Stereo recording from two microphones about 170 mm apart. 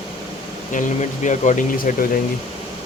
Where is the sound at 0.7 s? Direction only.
45° left (ahead or behind).